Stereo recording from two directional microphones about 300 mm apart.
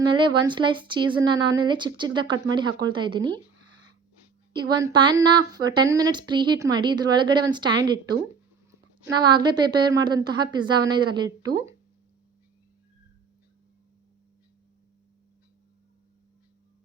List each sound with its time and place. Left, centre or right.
0.0 s speech: centre
4.5 s speech: centre